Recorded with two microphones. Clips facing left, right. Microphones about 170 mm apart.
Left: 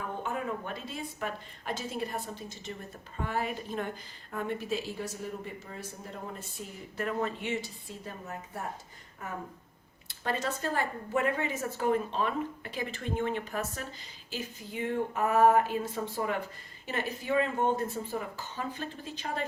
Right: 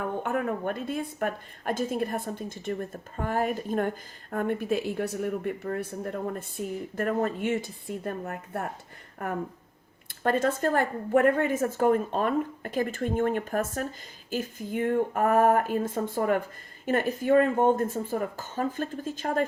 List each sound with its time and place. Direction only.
0.2 s a woman's voice: 60° right (ahead or behind)